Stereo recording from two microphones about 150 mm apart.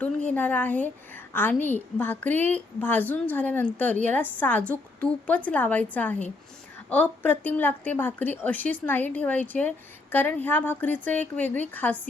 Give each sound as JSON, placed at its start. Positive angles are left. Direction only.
{"t": 0.0, "sound": "a woman's voice", "side_deg": 10}